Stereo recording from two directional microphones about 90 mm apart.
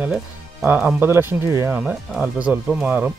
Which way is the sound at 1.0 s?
25° right (ahead or behind).